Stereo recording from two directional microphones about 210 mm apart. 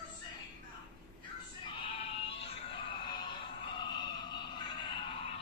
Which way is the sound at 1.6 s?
25° left (ahead or behind).